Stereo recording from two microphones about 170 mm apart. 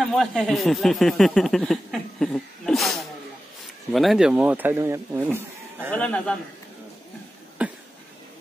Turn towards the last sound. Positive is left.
turn(degrees=-5)  # may be behind; listen again after turning